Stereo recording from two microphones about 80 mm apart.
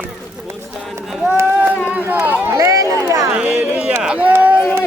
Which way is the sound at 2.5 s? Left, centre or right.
Right.